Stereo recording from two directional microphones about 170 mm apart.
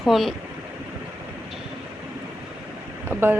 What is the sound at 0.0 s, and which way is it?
Speech, centre (ahead or behind).